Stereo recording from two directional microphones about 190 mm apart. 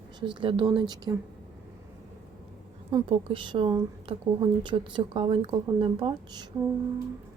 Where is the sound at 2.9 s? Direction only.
30° right (ahead or behind).